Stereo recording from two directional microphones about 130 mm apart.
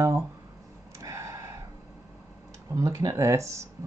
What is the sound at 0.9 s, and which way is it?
Gasp, 25° right (ahead or behind).